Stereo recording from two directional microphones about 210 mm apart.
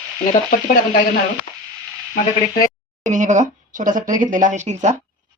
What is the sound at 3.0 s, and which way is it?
Speech, 35° right (ahead or behind).